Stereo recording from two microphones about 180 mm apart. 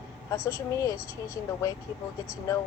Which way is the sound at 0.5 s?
15° left (ahead or behind).